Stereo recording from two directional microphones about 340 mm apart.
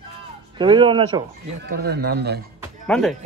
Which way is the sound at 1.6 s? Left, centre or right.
Right.